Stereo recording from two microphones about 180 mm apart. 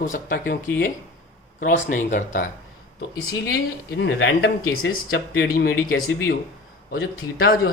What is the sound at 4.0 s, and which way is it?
Speech, 80° left.